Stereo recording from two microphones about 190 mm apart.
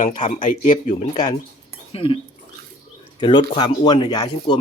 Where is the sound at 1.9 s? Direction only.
30° left (ahead or behind).